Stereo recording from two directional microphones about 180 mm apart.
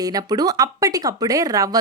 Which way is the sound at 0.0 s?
20° right (ahead or behind).